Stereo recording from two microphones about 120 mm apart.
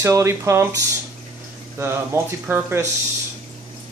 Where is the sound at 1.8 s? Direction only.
20° right (ahead or behind).